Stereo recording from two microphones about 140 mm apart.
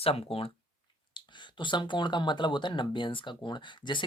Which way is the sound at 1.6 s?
35° left (ahead or behind).